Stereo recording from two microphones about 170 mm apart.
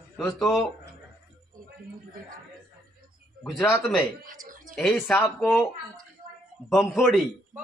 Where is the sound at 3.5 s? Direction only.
15° left (ahead or behind).